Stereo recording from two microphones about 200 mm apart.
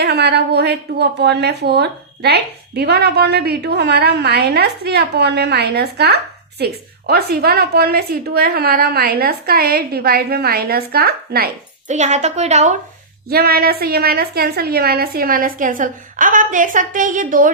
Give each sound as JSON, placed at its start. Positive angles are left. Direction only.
{"t": 0.0, "sound": "a woman's voice", "side_deg": -55}
{"t": 11.9, "sound": "a woman's voice", "side_deg": -35}
{"t": 13.2, "sound": "a woman's voice", "side_deg": -50}